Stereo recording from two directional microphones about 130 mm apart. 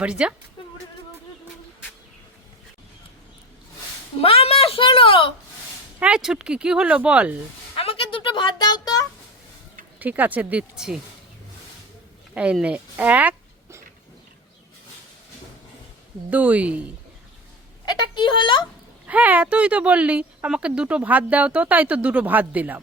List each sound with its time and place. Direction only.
0.0 s speech: 10° right (ahead or behind)
4.2 s a woman's voice: 50° left (ahead or behind)
6.0 s speech: 5° right (ahead or behind)
7.8 s music: 45° left (ahead or behind); by 9.0 s 30° left (ahead or behind)
10.0 s speech: 10° right (ahead or behind)
12.3 s speech: 10° right (ahead or behind)
16.3 s speech: 10° right (ahead or behind)
17.8 s speech: 35° left (ahead or behind)
19.0 s speech: 10° right (ahead or behind)